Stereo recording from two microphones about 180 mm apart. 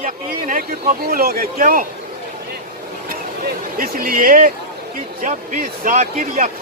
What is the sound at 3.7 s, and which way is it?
Speech, 55° right (ahead or behind).